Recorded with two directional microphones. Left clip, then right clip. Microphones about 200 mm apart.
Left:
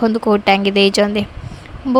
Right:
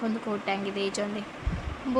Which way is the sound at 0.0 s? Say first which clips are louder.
Left 17 dB; 50° left (ahead or behind).